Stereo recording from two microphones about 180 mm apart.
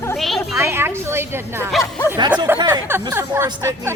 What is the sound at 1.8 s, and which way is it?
Speech, 20° left (ahead or behind).